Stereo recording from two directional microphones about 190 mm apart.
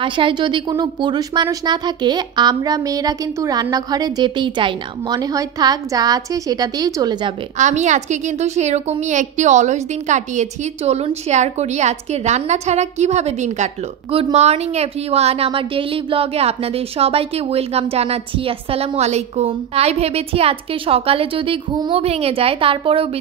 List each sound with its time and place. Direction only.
0.0 s speech: 25° right (ahead or behind)
7.5 s a woman's voice: 40° right (ahead or behind)